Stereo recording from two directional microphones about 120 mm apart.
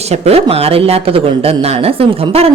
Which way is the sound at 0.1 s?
55° right (ahead or behind).